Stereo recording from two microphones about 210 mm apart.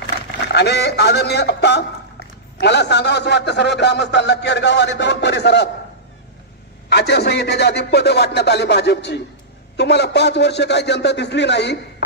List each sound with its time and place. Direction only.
0.5 s speech: 50° left (ahead or behind)
6.9 s speech: 50° left (ahead or behind)